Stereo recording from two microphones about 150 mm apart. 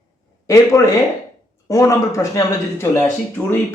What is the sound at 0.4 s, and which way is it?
Speech, 20° left (ahead or behind).